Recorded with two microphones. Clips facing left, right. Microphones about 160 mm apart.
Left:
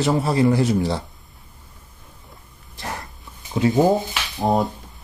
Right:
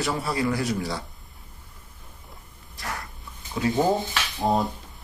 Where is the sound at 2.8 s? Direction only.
25° left (ahead or behind).